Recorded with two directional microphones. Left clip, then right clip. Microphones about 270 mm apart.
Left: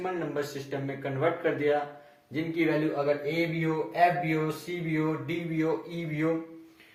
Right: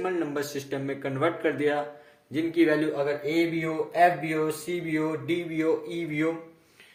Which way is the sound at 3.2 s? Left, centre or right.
Right.